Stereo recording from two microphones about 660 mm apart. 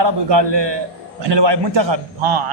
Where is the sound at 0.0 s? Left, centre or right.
Right.